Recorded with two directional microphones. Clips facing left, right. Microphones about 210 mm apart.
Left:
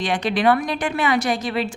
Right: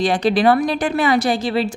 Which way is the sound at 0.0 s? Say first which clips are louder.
Right 4 dB; 35° right (ahead or behind).